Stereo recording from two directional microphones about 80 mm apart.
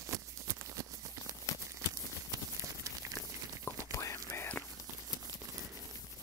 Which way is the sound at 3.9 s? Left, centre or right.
Left.